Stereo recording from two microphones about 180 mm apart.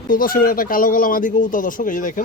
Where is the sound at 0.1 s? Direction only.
50° left (ahead or behind).